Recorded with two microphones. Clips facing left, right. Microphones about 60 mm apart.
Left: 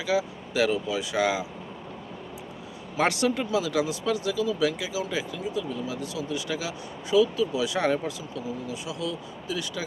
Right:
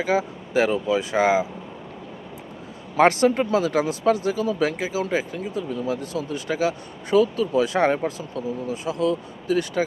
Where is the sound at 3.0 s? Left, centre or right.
Right.